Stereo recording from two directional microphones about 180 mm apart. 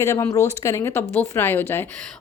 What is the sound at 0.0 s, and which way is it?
Speech, 15° left (ahead or behind).